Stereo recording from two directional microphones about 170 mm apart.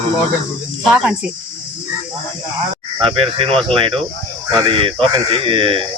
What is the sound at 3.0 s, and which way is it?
Speech, 30° right (ahead or behind).